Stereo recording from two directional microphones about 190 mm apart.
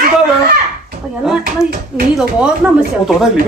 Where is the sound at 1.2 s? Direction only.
Centre (ahead or behind).